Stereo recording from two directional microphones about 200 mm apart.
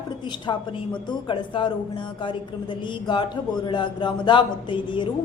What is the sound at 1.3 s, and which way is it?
Speech, 25° left (ahead or behind).